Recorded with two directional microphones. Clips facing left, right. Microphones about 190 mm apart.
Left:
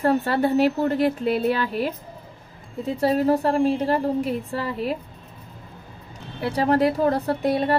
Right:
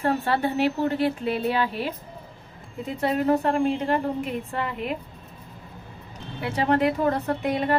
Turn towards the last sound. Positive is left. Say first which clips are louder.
# left 3 dB
turn(degrees=35)  # may be behind; listen again after turning